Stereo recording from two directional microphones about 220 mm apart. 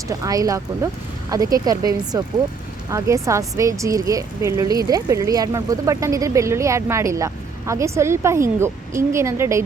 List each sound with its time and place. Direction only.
0.1 s a woman's voice: 15° right (ahead or behind)